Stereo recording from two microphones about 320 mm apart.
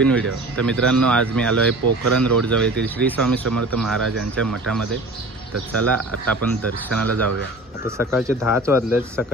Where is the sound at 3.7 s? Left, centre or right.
Centre.